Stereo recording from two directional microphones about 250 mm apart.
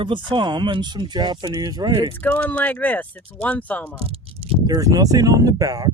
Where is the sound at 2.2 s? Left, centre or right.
Centre.